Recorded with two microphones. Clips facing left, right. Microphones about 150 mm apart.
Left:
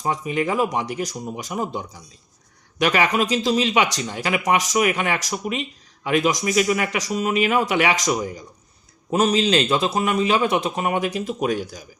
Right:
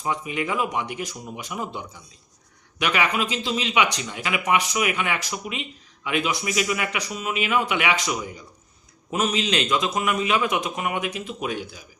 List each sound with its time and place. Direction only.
0.0 s speech: 35° left (ahead or behind)